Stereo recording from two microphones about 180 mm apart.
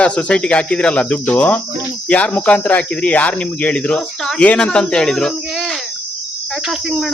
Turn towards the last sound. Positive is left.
turn(degrees=0)  # may be behind; listen again after turning